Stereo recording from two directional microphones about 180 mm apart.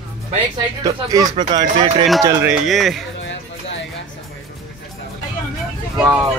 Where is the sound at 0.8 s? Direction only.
20° right (ahead or behind).